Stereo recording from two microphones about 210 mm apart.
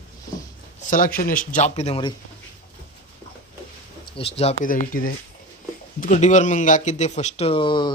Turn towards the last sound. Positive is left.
turn(degrees=25)  # may be behind; listen again after turning